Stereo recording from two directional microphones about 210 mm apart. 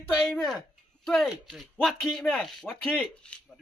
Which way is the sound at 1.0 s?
Centre (ahead or behind).